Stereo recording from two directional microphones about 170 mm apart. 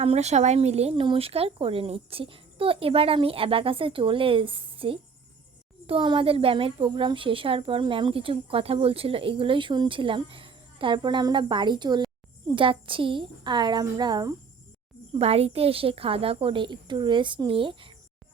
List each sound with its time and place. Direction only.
0.0 s a woman's voice: 40° right (ahead or behind); by 14.3 s 25° right (ahead or behind)
15.1 s a woman's voice: 35° right (ahead or behind)